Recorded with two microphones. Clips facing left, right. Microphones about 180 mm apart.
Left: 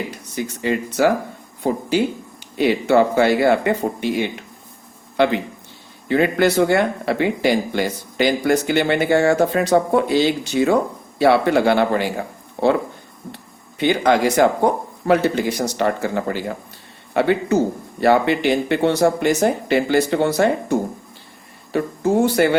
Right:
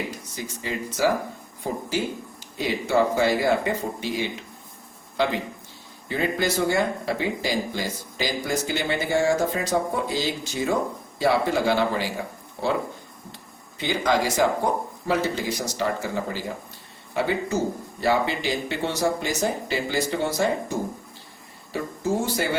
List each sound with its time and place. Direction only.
0.3 s speech: 65° left (ahead or behind)